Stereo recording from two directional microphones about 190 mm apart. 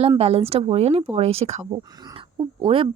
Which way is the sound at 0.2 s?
35° right (ahead or behind).